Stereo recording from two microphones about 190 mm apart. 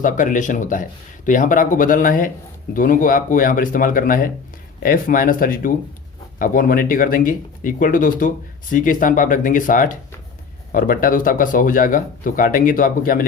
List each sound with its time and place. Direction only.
0.0 s speech: 45° left (ahead or behind)